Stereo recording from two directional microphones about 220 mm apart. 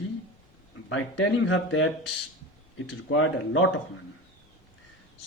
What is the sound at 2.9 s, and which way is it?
Speech, 65° left (ahead or behind).